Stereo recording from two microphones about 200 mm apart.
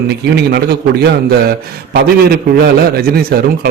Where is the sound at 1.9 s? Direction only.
50° right (ahead or behind).